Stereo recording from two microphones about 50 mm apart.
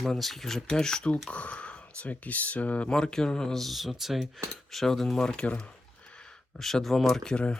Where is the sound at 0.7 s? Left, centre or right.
Centre.